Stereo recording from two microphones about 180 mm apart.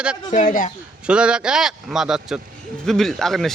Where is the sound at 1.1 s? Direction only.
5° right (ahead or behind).